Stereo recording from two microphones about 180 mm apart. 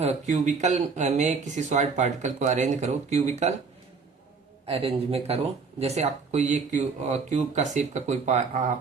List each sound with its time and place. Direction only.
0.0 s speech: 40° right (ahead or behind)
4.6 s speech: 35° right (ahead or behind)